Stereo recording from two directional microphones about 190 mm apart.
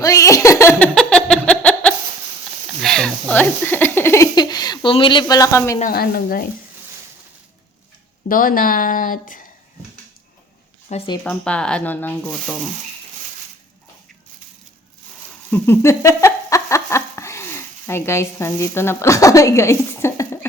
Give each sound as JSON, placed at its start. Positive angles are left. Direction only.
{"t": 0.0, "sound": "giggle", "side_deg": 15}
{"t": 2.8, "sound": "a sound", "side_deg": 5}
{"t": 5.8, "sound": "speech", "side_deg": 55}
{"t": 8.3, "sound": "speech", "side_deg": 45}
{"t": 10.8, "sound": "speech", "side_deg": 35}
{"t": 11.2, "sound": "speech", "side_deg": 5}
{"t": 15.4, "sound": "a sound", "side_deg": 10}